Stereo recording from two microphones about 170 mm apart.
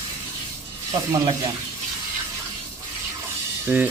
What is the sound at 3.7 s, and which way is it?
Music, 15° right (ahead or behind).